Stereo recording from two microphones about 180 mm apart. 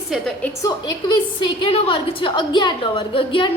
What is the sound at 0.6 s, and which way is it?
A woman's voice, 25° left (ahead or behind).